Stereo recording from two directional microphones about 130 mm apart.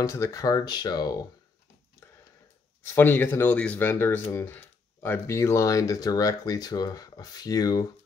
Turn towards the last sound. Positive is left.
turn(degrees=30)  # may be behind; listen again after turning